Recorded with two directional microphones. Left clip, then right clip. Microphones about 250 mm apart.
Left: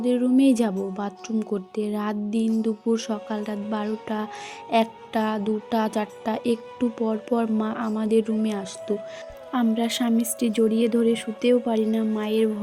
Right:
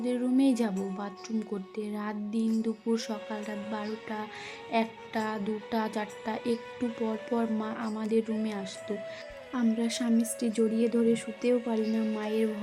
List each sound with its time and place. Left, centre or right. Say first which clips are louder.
0.0 s speech: left 7 dB; left